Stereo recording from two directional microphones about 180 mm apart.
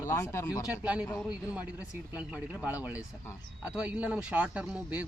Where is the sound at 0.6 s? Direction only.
5° right (ahead or behind).